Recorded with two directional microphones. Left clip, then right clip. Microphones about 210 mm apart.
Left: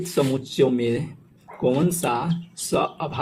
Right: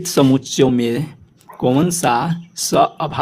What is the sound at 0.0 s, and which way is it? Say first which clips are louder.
Speech: right 8 dB; 40° right (ahead or behind).